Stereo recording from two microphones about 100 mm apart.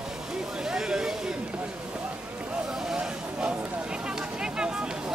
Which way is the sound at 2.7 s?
5° right (ahead or behind).